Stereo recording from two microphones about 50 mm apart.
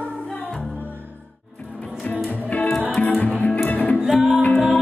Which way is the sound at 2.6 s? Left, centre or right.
Left.